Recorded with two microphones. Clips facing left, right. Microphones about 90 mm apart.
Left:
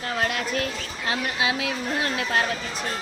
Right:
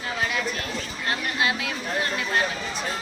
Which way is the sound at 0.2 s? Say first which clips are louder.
Left 2 dB; 65° left (ahead or behind).